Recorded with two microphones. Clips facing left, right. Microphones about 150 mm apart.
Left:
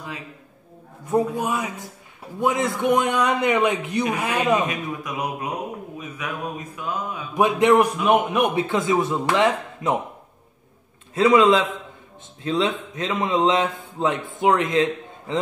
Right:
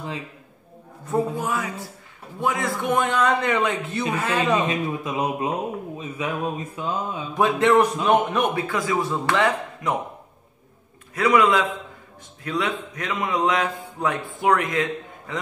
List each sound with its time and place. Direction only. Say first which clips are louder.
1.1 s a man's voice: left 2 dB; 20° left (ahead or behind)
4.6 s speech: right 3 dB; 25° right (ahead or behind)
7.3 s a man's voice: left 1 dB; 15° left (ahead or behind)
8.5 s speech: left 3 dB; 25° left (ahead or behind)
11.1 s speech: left 3 dB; 25° left (ahead or behind)